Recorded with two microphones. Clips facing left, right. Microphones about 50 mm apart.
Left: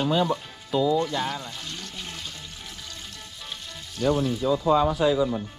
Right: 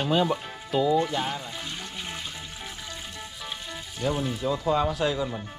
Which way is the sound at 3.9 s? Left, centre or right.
Centre.